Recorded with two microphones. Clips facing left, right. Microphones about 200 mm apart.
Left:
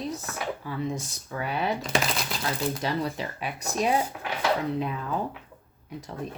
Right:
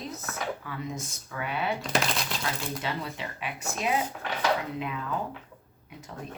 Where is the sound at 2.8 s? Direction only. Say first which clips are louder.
Left 5 dB; 40° left (ahead or behind).